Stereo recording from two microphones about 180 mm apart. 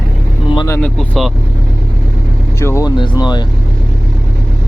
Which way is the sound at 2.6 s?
15° left (ahead or behind).